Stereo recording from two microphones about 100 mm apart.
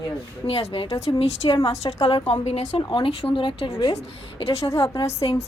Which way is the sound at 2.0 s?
70° left (ahead or behind).